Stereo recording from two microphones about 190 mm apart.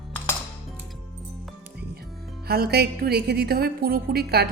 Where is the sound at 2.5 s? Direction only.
55° right (ahead or behind).